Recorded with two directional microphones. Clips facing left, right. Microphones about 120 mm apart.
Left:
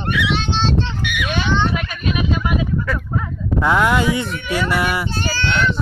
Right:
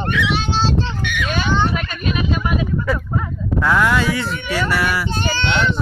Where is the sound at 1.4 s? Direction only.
10° right (ahead or behind).